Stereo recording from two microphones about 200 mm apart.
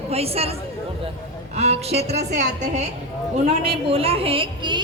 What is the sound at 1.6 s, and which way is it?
A woman's voice, 30° right (ahead or behind).